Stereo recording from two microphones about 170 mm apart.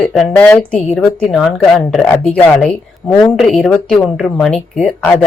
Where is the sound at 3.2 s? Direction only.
Centre (ahead or behind).